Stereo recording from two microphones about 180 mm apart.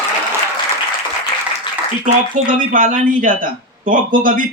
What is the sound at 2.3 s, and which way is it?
Speech, 50° right (ahead or behind).